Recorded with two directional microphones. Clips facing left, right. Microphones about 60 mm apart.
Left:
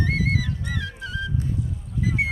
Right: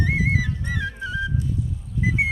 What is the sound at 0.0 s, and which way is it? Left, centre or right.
Music, right.